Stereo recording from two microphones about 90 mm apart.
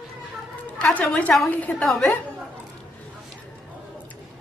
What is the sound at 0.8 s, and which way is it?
Speech, 15° left (ahead or behind).